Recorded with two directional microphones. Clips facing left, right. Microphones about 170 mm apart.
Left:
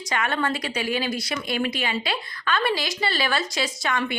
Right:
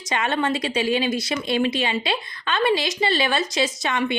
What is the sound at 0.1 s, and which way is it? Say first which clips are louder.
Speech: right 3 dB; 25° right (ahead or behind).